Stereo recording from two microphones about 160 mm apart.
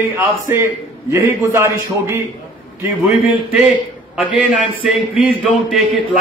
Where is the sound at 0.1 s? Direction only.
15° right (ahead or behind).